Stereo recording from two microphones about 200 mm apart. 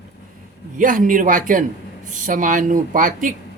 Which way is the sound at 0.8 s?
40° right (ahead or behind).